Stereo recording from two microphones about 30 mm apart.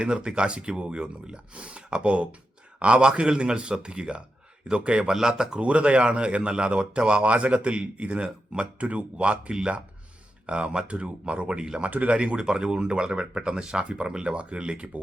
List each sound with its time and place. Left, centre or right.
0.0 s speech: right
5.1 s speech: right
5.5 s speech: right
9.1 s speech: right
9.5 s speech: right
10.4 s speech: right
11.9 s speech: right
12.1 s speech: right
12.4 s speech: right